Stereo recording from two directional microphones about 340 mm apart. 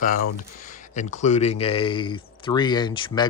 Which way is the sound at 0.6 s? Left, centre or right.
Left.